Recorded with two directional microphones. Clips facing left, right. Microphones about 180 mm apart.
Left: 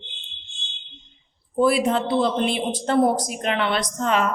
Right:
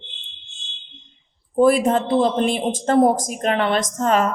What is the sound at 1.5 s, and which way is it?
A woman's voice, 45° right (ahead or behind).